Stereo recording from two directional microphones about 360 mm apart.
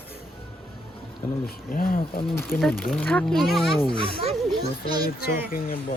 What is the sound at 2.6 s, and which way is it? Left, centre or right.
Speech, centre.